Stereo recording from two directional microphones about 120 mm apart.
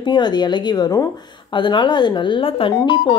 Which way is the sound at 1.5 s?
40° left (ahead or behind).